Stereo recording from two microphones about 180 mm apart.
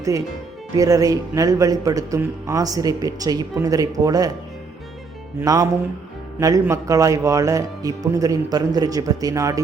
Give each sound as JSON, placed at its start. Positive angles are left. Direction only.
{"t": 0.8, "sound": "a man's voice", "side_deg": -20}
{"t": 5.4, "sound": "a man's voice", "side_deg": -20}